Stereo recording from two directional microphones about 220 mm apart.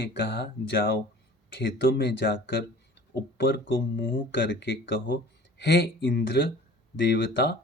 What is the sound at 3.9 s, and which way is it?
Speech, 55° left (ahead or behind).